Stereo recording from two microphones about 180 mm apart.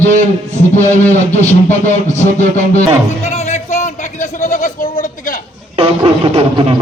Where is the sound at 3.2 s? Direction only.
40° left (ahead or behind).